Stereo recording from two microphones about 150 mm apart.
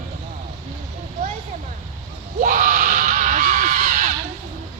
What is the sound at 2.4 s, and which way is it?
Screaming, 60° right (ahead or behind).